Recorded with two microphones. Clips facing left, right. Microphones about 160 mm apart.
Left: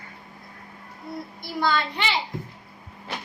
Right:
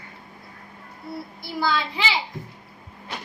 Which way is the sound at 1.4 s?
5° right (ahead or behind).